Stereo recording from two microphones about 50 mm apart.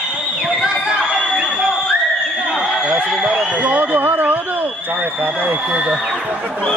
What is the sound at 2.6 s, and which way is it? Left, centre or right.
A man's voice, centre.